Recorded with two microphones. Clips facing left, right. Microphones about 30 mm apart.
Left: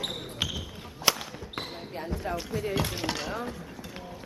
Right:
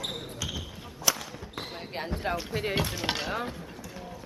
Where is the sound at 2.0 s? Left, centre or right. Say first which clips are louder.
Right 2 dB; right.